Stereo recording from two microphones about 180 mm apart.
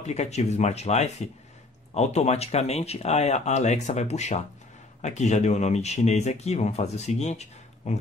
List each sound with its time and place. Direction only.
0.0 s speech: 40° left (ahead or behind)